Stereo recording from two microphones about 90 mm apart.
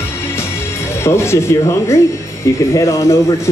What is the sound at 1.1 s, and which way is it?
Speech, 30° left (ahead or behind).